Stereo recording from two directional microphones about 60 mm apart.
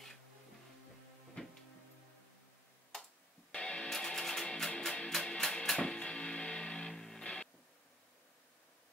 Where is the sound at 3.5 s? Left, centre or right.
Centre.